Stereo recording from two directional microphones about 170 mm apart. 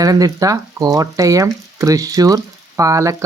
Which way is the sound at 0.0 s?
20° right (ahead or behind).